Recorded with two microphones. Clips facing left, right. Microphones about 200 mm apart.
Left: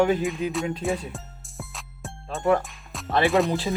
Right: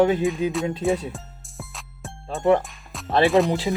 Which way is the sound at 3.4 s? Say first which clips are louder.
Right 2 dB; 20° right (ahead or behind).